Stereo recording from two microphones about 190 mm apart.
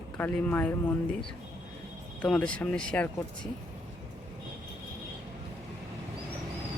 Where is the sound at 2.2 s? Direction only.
5° left (ahead or behind).